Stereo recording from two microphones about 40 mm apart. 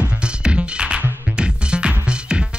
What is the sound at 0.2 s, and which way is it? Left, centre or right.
Music, right.